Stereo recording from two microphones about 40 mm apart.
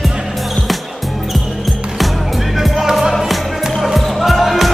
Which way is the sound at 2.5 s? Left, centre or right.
Centre.